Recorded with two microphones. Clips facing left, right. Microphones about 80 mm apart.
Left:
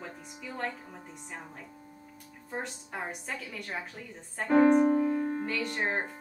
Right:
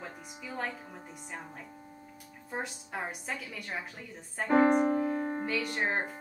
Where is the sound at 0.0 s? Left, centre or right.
Centre.